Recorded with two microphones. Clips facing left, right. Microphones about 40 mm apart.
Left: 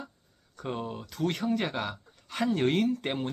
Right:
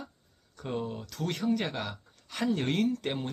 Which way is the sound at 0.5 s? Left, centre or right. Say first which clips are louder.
Even; centre.